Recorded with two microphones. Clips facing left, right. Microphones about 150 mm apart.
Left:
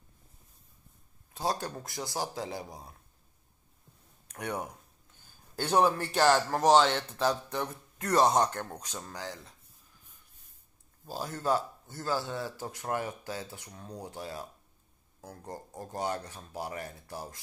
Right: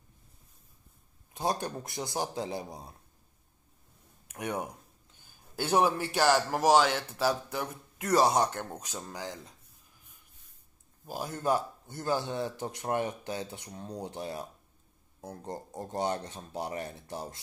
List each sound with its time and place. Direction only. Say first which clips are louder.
1.3 s speech: right 1 dB; 20° right (ahead or behind)
4.3 s a sound: right 1 dB; 15° right (ahead or behind)
6.2 s speech: left 1 dB; 5° right (ahead or behind)
8.5 s speech: even; 15° right (ahead or behind)
11.1 s speech: right 1 dB; 15° right (ahead or behind)